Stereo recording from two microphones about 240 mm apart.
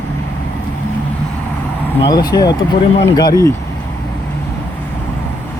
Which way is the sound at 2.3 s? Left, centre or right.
Centre.